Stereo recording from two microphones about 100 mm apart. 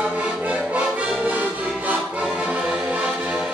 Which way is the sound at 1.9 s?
10° right (ahead or behind).